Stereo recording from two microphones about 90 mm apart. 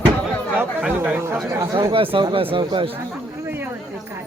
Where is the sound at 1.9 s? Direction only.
85° right.